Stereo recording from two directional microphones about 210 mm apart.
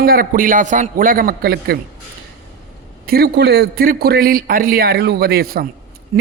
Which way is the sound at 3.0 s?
45° right (ahead or behind).